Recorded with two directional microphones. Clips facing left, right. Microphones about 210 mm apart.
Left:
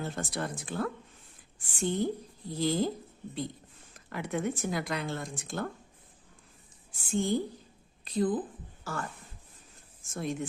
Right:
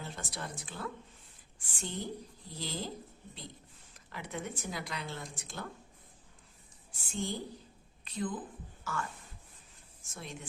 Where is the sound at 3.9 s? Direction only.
55° left (ahead or behind).